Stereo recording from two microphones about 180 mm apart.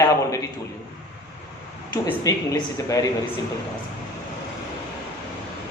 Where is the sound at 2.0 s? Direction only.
15° left (ahead or behind).